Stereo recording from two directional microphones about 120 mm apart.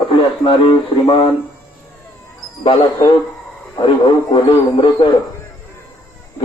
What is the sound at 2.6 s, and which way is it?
A man's voice, 45° left (ahead or behind).